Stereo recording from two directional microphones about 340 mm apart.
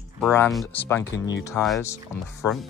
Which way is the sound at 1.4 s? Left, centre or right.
Centre.